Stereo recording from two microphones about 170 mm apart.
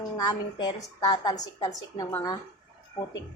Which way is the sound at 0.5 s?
25° left (ahead or behind).